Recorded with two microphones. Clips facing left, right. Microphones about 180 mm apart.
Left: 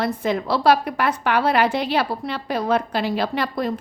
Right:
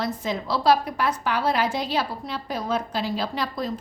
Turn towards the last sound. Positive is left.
turn(degrees=60)  # may be behind; listen again after turning